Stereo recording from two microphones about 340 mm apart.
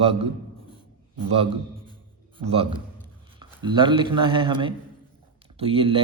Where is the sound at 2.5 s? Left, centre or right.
Centre.